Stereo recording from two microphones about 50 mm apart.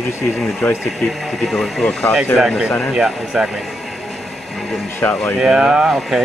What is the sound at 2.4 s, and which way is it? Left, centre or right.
Speech, centre.